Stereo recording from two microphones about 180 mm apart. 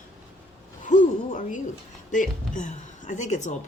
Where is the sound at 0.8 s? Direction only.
45° left (ahead or behind).